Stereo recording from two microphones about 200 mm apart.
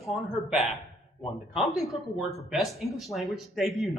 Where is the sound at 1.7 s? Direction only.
Centre (ahead or behind).